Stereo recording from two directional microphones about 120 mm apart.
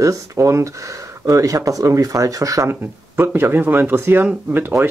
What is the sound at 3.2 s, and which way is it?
Speech, 20° right (ahead or behind).